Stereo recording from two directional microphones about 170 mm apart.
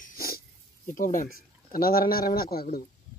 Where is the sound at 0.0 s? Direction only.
60° left (ahead or behind).